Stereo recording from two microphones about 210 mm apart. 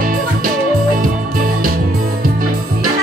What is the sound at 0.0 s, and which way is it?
Music, 40° right (ahead or behind).